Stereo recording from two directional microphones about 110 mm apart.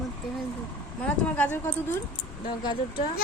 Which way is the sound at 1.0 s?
15° left (ahead or behind).